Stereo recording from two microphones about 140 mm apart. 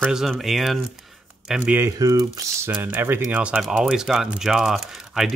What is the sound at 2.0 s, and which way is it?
Speech, 25° right (ahead or behind).